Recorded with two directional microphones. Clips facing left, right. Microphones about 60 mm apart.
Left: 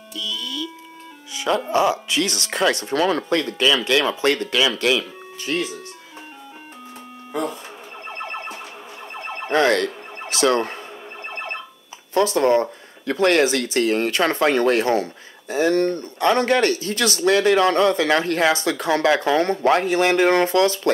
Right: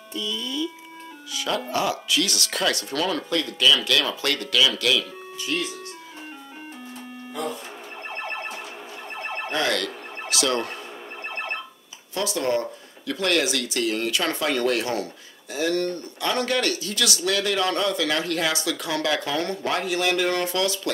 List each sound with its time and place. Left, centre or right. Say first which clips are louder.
0.1 s speech: even; right
1.3 s music: left 5 dB; left
1.7 s speech: left 6 dB; left
9.5 s speech: left 8 dB; left
12.1 s speech: left 8 dB; left